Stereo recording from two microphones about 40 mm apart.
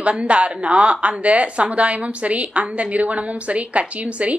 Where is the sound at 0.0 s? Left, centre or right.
Right.